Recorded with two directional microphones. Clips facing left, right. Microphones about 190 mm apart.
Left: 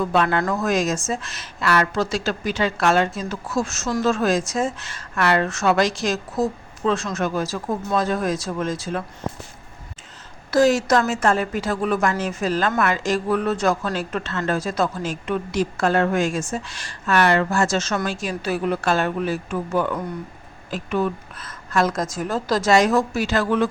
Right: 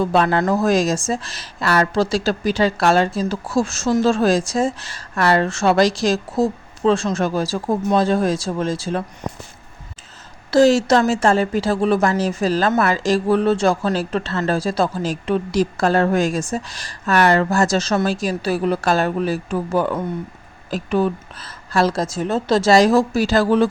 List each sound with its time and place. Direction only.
0.0 s a woman's voice: 35° right (ahead or behind)
10.5 s a woman's voice: 30° right (ahead or behind)